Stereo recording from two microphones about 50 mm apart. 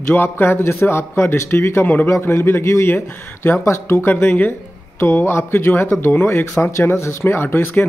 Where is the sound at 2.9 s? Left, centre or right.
Left.